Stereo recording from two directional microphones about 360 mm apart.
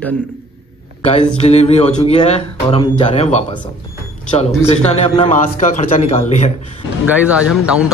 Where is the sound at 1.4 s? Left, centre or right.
Centre.